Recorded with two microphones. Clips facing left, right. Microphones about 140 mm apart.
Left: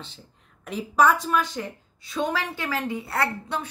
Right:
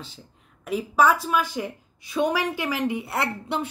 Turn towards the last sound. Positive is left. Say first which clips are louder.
# even
turn(degrees=-20)  # may be behind; listen again after turning